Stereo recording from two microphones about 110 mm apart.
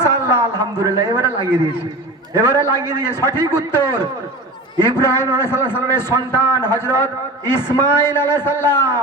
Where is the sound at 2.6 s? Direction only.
35° right (ahead or behind).